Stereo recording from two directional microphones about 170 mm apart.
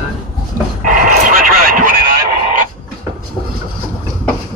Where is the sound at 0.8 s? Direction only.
55° right (ahead or behind).